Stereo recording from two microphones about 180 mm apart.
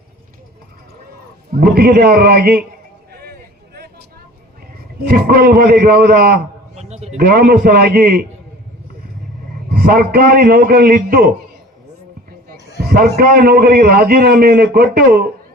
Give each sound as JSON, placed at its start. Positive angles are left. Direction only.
{"t": 1.7, "sound": "a man's voice", "side_deg": -60}
{"t": 3.1, "sound": "a sound", "side_deg": -60}
{"t": 5.0, "sound": "a man's voice", "side_deg": -60}
{"t": 6.7, "sound": "a sound", "side_deg": -35}
{"t": 7.2, "sound": "a man's voice", "side_deg": -60}
{"t": 9.7, "sound": "a man's voice", "side_deg": -55}
{"t": 12.8, "sound": "a man's voice", "side_deg": -55}